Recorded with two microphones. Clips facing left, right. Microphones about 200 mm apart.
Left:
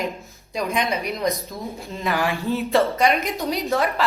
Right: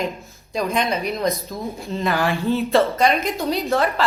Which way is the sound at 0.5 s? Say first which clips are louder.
Right 2 dB; 15° left (ahead or behind).